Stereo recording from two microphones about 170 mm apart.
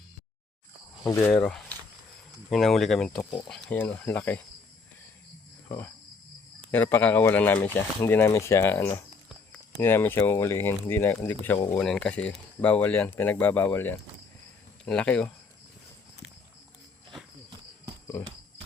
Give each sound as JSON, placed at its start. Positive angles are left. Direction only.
{"t": 1.0, "sound": "speech", "side_deg": 15}
{"t": 1.3, "sound": "speech", "side_deg": 5}
{"t": 5.6, "sound": "speech", "side_deg": 10}
{"t": 11.8, "sound": "speech", "side_deg": 5}
{"t": 18.1, "sound": "speech", "side_deg": 10}